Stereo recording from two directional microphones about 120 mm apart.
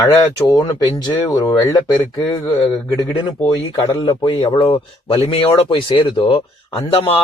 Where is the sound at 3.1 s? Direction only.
40° left (ahead or behind).